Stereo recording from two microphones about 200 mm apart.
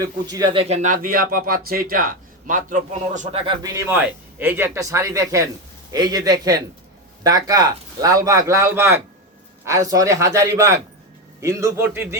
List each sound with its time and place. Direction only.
0.0 s speech: 20° right (ahead or behind); by 3.4 s 40° right (ahead or behind)
3.4 s a man's voice: 20° right (ahead or behind)